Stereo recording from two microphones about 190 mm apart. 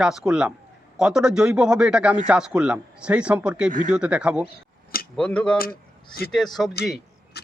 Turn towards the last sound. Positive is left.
turn(degrees=0)  # may be behind; listen again after turning